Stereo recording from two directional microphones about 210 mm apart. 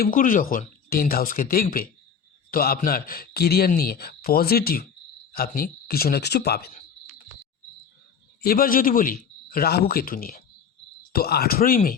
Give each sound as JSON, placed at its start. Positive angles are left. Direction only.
{"t": 0.0, "sound": "a man's voice", "side_deg": 40}
{"t": 8.4, "sound": "a man's voice", "side_deg": 45}